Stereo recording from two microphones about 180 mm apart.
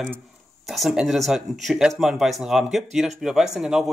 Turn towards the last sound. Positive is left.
turn(degrees=-5)  # may be behind; listen again after turning